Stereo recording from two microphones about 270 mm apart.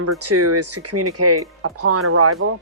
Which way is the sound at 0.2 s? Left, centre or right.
Right.